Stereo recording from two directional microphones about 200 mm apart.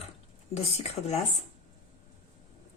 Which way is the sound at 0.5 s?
30° left (ahead or behind).